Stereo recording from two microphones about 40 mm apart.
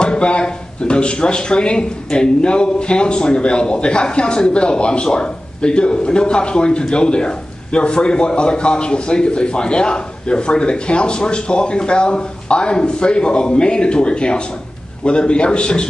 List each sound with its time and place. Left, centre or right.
0.0 s speech: left